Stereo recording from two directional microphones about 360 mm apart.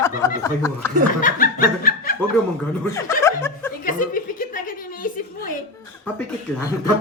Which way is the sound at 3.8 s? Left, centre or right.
Left.